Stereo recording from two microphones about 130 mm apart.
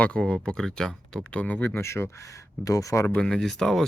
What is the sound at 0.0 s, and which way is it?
Speech, 10° left (ahead or behind).